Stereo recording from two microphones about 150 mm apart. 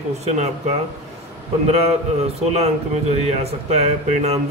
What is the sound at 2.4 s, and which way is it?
A man's voice, 45° right (ahead or behind).